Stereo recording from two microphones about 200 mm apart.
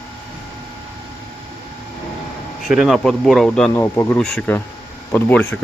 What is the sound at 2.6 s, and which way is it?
Speech, centre (ahead or behind).